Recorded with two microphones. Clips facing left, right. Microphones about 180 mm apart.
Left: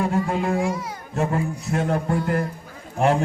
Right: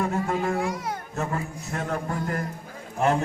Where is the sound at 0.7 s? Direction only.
60° right (ahead or behind).